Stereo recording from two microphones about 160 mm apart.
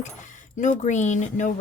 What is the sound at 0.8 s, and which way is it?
Speech, 50° left (ahead or behind).